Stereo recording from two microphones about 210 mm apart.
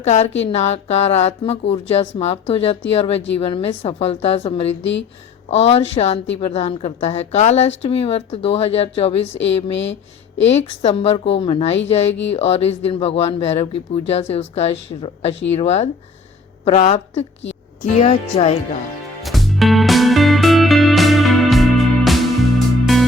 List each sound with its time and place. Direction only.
0.0 s speech: 30° left (ahead or behind)
4.8 s speech: 60° left (ahead or behind)
5.5 s speech: 30° left (ahead or behind)
10.4 s speech: 30° left (ahead or behind)
19.2 s music: centre (ahead or behind)